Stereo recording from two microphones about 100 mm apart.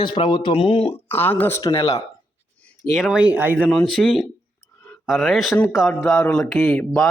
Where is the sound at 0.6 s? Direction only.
80° left.